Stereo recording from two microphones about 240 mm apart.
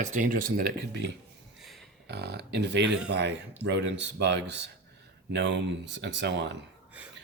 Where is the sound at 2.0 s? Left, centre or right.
Right.